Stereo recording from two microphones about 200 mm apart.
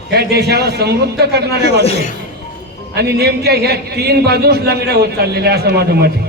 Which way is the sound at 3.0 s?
55° right (ahead or behind).